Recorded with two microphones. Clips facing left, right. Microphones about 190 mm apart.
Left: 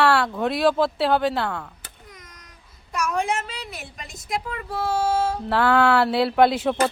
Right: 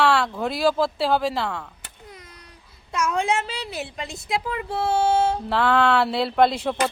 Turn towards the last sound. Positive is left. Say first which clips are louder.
# left 2 dB
turn(degrees=0)  # may be behind; listen again after turning